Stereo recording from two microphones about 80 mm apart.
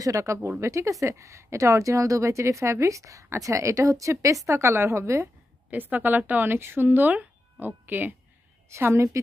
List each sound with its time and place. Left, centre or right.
0.0 s a woman's voice: right
5.7 s speech: right
8.6 s a woman's voice: right